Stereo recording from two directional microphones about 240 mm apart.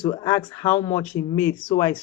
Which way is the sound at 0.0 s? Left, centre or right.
Centre.